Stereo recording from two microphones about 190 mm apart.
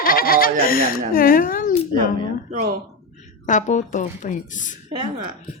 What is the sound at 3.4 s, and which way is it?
Music, 40° left (ahead or behind).